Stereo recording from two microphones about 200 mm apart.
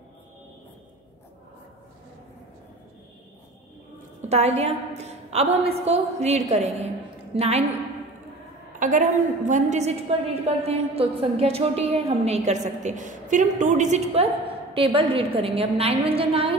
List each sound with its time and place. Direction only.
4.3 s a woman's voice: 30° right (ahead or behind)
8.7 s a sound: 40° right (ahead or behind)
9.5 s a woman's voice: 35° right (ahead or behind)